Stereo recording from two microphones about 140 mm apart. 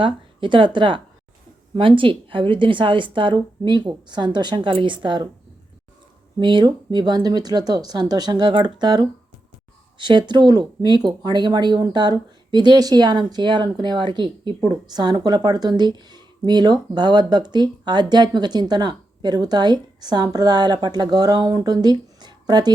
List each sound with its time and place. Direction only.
0.0 s speech: 35° right (ahead or behind)
6.4 s speech: 35° right (ahead or behind)